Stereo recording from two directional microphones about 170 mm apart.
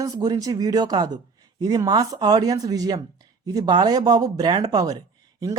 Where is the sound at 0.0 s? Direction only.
20° right (ahead or behind).